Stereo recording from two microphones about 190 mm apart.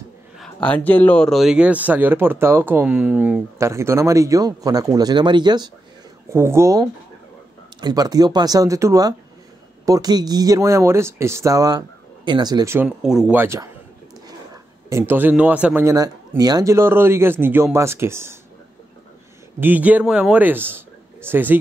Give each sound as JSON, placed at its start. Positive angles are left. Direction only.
{"t": 0.4, "sound": "speech", "side_deg": 5}
{"t": 19.6, "sound": "speech", "side_deg": -10}